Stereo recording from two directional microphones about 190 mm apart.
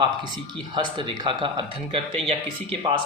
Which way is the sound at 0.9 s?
25° right (ahead or behind).